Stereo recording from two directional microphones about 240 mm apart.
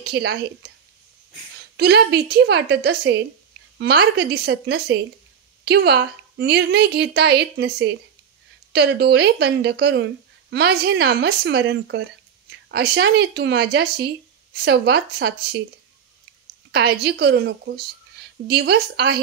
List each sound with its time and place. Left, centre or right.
0.0 s speech: right
1.8 s speech: right
17.0 s speech: right